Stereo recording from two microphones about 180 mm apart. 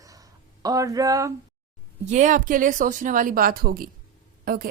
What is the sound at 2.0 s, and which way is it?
A woman's voice, 45° right (ahead or behind).